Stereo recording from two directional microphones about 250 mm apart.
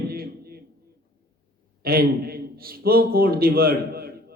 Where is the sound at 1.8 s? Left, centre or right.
Right.